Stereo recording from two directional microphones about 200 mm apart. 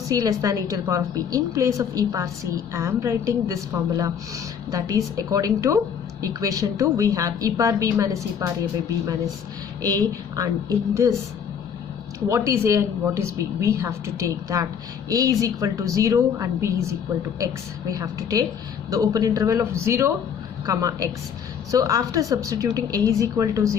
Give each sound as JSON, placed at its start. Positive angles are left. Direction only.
{"t": 0.1, "sound": "a woman's voice", "side_deg": -20}
{"t": 9.8, "sound": "a woman's voice", "side_deg": -20}
{"t": 12.3, "sound": "a woman's voice", "side_deg": -15}